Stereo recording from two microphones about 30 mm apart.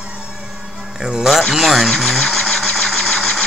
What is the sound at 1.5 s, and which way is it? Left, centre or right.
Sewing machine, centre.